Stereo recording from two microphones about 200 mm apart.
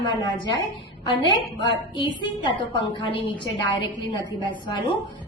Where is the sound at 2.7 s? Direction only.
25° left (ahead or behind).